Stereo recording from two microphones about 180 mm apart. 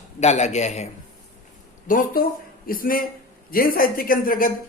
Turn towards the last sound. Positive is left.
turn(degrees=50)  # may be behind; listen again after turning